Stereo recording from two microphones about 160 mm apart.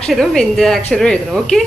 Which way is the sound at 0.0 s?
5° left (ahead or behind).